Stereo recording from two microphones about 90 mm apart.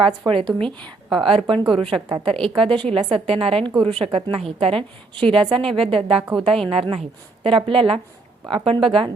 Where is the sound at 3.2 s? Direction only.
90° right.